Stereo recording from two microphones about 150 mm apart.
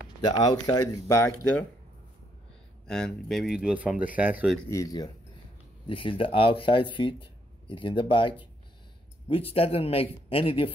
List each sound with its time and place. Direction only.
0.3 s speech: 25° left (ahead or behind)
2.9 s speech: centre (ahead or behind)
4.6 s speech: 20° left (ahead or behind)
5.9 s speech: 35° left (ahead or behind)